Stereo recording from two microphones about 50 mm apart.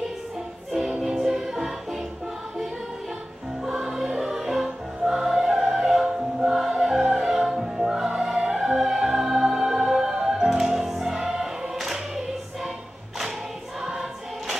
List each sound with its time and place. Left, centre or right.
0.7 s music: centre
3.6 s music: centre